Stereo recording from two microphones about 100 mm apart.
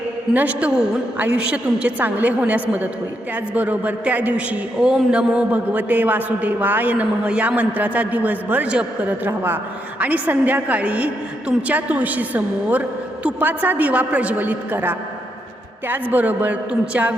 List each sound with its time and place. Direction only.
0.3 s a man's voice: 15° right (ahead or behind)